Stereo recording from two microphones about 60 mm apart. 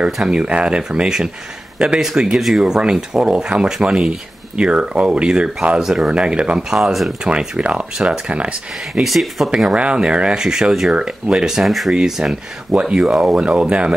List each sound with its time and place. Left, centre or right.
0.0 s speech: centre
2.6 s speech: centre
5.9 s speech: centre
6.8 s speech: centre
7.2 s speech: centre
9.0 s speech: centre
9.8 s speech: centre